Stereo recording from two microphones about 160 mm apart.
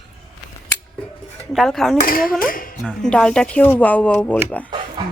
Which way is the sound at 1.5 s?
Centre (ahead or behind).